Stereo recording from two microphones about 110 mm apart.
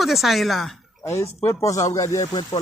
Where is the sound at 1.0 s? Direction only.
25° left (ahead or behind).